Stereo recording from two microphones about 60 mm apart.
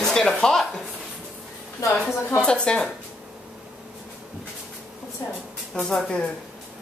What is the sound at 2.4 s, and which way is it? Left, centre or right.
Speech, centre.